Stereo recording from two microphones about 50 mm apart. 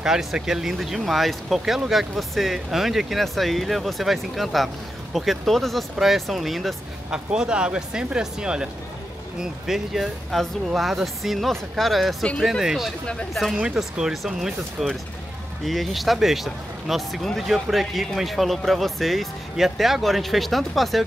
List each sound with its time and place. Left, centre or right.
0.0 s speech: centre
7.1 s speech: centre
9.4 s speech: centre
13.0 s speech: centre
13.3 s speech: centre